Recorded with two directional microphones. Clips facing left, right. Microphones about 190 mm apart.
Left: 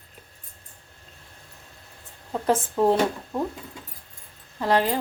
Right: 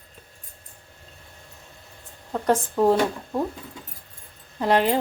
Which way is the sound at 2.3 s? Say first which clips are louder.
Right 1 dB; centre (ahead or behind).